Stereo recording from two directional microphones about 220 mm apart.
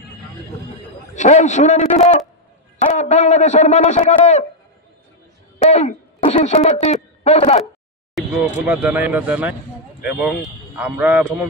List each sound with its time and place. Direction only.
1.1 s a man's voice: 35° left (ahead or behind)
5.6 s speech: 30° left (ahead or behind)
8.2 s vehicle: centre (ahead or behind)
8.6 s a man's voice: 5° right (ahead or behind)